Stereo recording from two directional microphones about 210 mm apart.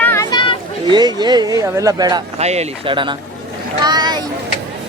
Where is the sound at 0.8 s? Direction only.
20° right (ahead or behind).